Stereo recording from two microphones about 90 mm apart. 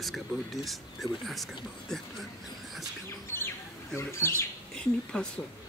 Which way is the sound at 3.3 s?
30° left (ahead or behind).